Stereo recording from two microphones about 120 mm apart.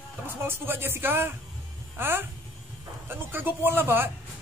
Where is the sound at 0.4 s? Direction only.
20° right (ahead or behind).